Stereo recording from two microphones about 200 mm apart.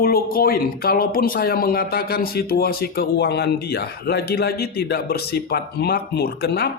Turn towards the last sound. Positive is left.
turn(degrees=55)  # may be behind; listen again after turning